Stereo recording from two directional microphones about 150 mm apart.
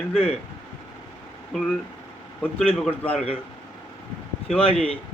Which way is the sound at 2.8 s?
5° left (ahead or behind).